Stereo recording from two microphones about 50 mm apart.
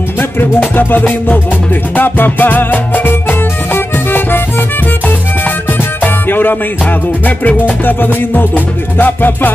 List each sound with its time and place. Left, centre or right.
0.6 s music: left